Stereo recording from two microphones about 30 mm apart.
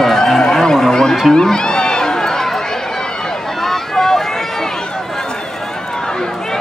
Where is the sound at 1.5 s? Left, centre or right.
Left.